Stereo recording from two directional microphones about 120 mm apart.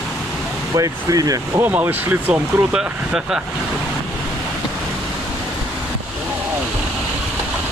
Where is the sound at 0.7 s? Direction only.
30° right (ahead or behind).